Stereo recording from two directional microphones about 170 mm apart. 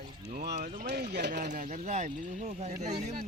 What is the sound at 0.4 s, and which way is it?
Speech, 70° right (ahead or behind).